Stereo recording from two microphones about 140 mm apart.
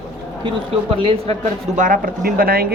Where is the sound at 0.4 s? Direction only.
40° right (ahead or behind).